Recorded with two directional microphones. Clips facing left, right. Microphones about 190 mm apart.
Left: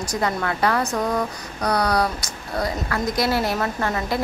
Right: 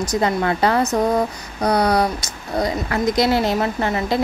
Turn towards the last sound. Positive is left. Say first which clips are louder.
# right 4 dB
turn(degrees=-20)  # may be behind; listen again after turning